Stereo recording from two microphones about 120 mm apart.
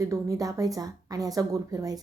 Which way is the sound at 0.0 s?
25° right (ahead or behind).